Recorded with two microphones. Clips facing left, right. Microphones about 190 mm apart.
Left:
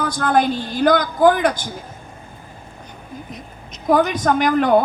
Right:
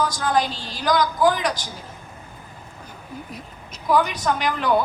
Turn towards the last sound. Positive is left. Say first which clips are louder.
# left 6 dB
turn(degrees=50)  # may be behind; listen again after turning